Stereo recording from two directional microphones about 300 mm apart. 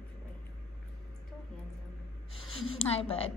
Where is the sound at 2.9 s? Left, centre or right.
Centre.